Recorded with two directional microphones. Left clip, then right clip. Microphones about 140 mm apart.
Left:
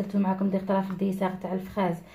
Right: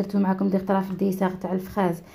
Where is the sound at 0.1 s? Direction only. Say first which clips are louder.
Right 2 dB; 35° right (ahead or behind).